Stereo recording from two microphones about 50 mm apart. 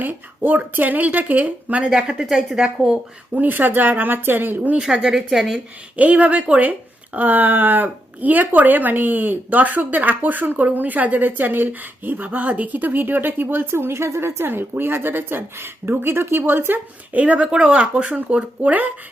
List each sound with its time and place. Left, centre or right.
0.0 s speech: right
1.9 s speech: centre
3.3 s speech: right
4.8 s a woman's voice: centre
6.0 s a woman's voice: right
17.2 s speech: right